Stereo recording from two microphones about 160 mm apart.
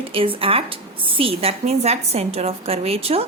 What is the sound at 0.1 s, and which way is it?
Speech, 35° right (ahead or behind).